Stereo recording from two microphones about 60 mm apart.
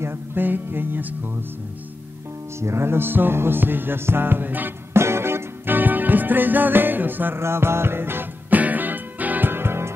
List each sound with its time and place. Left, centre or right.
0.0 s music: right
2.6 s music: right
4.9 s music: right